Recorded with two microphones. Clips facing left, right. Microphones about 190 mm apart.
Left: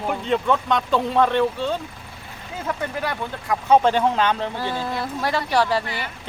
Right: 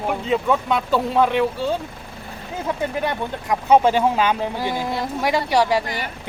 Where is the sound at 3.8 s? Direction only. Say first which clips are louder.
Right 1 dB; 10° right (ahead or behind).